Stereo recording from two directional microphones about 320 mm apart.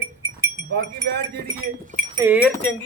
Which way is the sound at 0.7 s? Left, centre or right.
Right.